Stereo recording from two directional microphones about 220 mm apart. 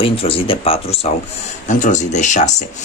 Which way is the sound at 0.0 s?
25° left (ahead or behind).